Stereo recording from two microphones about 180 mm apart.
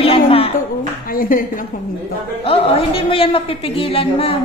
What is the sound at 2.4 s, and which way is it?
A woman's voice, 30° left (ahead or behind).